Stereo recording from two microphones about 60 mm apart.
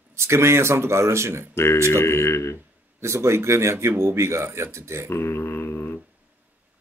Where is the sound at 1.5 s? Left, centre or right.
Left.